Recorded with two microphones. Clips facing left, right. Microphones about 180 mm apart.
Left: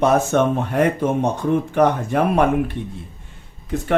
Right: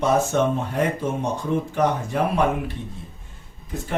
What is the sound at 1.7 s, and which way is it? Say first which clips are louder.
Speech: left 5 dB; 60° left (ahead or behind).